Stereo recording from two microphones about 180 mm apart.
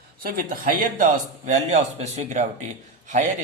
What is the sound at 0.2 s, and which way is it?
Speech, 55° right (ahead or behind).